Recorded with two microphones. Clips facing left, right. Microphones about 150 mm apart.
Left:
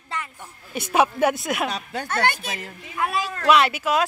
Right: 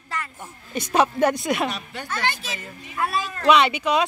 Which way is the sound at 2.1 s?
60° left (ahead or behind).